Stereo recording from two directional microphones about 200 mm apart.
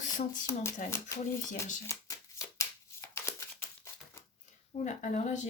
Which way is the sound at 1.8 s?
15° left (ahead or behind).